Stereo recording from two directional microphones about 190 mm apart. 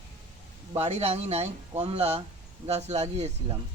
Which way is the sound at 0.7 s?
35° right (ahead or behind).